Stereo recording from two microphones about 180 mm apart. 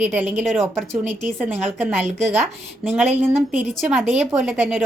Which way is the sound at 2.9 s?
10° right (ahead or behind).